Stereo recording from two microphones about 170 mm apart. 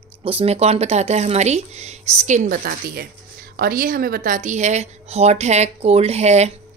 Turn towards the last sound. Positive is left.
turn(degrees=-40)  # may be behind; listen again after turning